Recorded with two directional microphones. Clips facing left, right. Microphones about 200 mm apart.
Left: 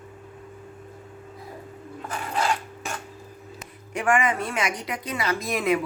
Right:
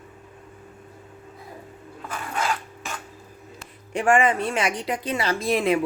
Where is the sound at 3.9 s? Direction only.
30° right (ahead or behind).